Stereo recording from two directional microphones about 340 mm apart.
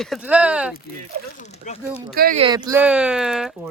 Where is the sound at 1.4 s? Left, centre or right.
Centre.